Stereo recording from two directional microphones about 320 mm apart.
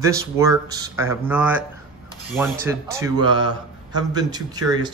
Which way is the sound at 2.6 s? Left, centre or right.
Centre.